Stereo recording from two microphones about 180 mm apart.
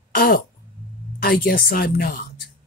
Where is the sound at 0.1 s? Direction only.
55° left (ahead or behind).